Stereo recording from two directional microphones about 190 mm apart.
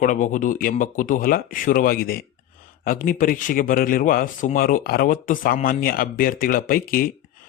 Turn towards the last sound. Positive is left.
turn(degrees=50)  # may be behind; listen again after turning